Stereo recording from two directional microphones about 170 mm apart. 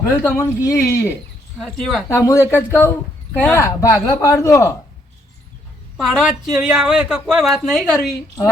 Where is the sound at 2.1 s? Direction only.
15° left (ahead or behind).